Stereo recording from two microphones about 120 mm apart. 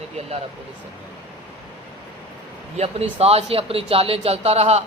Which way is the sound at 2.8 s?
55° right (ahead or behind).